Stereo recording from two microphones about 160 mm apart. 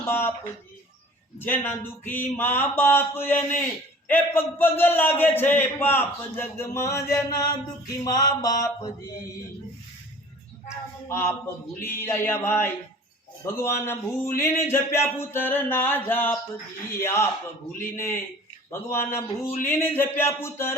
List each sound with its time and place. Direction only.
0.0 s speech: 15° left (ahead or behind)
1.4 s speech: 10° left (ahead or behind)
8.0 s mantra: 25° left (ahead or behind)
11.1 s speech: 15° left (ahead or behind)